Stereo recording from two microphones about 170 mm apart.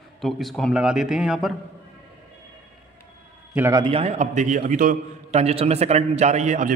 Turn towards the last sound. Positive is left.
turn(degrees=-45)  # may be behind; listen again after turning